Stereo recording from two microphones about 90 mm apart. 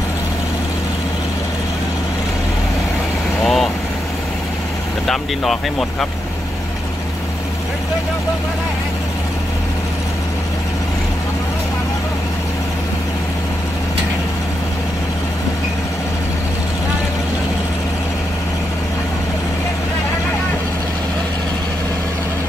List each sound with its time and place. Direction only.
3.4 s vehicle: centre (ahead or behind)
5.0 s speech: 5° left (ahead or behind)